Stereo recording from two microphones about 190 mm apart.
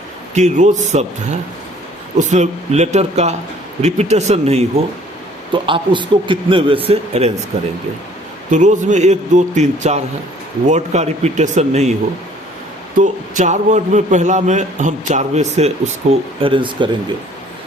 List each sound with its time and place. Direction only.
0.3 s a man's voice: 40° right (ahead or behind)
8.4 s a man's voice: 40° right (ahead or behind)
13.0 s a man's voice: 40° right (ahead or behind); by 16.9 s 25° right (ahead or behind)